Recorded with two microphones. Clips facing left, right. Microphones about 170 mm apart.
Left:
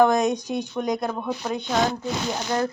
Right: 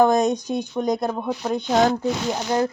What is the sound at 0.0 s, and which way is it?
Speech, 25° right (ahead or behind).